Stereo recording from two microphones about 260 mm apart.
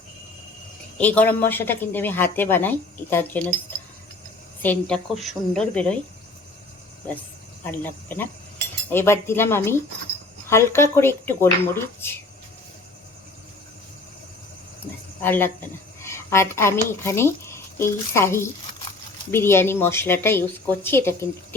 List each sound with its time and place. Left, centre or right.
0.9 s a woman's voice: centre
4.6 s a woman's voice: centre
7.6 s a woman's voice: centre
15.2 s a woman's voice: centre